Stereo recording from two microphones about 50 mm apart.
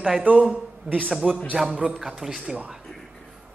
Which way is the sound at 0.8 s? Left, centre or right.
Right.